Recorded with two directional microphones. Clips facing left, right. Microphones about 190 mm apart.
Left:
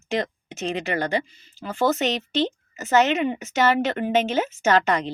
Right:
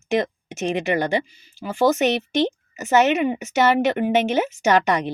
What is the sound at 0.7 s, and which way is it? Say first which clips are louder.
Speech: right 3 dB; 15° right (ahead or behind).